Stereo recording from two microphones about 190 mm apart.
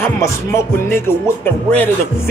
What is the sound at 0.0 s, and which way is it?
Music, 15° left (ahead or behind).